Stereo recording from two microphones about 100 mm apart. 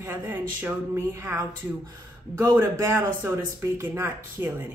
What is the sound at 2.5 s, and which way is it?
Speech, 25° right (ahead or behind).